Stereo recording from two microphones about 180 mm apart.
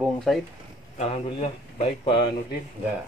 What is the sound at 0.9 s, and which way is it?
Speech, 35° left (ahead or behind).